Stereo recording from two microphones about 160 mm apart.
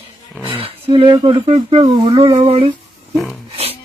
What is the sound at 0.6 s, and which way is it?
Speech, 35° right (ahead or behind).